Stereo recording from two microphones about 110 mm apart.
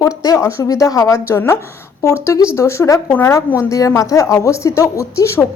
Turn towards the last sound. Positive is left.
turn(degrees=25)  # may be behind; listen again after turning